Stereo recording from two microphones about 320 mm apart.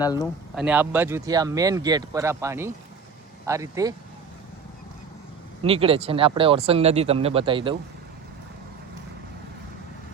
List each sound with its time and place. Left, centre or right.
0.0 s speech: centre
0.5 s speech: centre
5.6 s speech: centre